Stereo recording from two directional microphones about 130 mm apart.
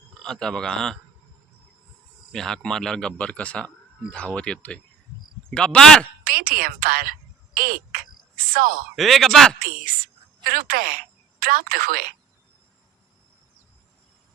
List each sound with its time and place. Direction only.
0.1 s speech: 5° left (ahead or behind)
2.3 s speech: 5° left (ahead or behind)
6.2 s a sound: 90° right
9.0 s speech: centre (ahead or behind)
9.6 s a woman's voice: 90° right